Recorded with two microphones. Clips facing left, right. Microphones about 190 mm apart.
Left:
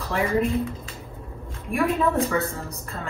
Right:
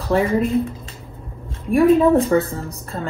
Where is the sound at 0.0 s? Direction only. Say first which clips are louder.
Right 5 dB; 30° right (ahead or behind).